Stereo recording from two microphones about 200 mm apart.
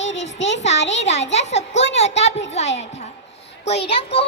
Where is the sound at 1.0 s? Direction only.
35° left (ahead or behind).